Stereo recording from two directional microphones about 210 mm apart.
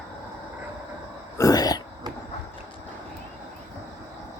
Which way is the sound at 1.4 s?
20° left (ahead or behind).